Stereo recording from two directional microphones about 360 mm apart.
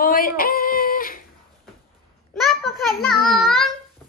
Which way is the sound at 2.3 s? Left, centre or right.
Centre.